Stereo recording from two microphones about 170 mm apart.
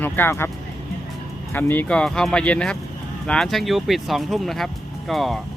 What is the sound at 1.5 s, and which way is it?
Speech, 10° left (ahead or behind).